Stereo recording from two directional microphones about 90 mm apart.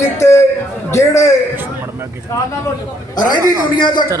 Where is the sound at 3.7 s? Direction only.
60° left (ahead or behind).